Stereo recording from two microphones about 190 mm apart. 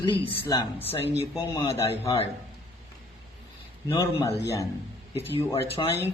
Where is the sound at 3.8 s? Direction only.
20° left (ahead or behind).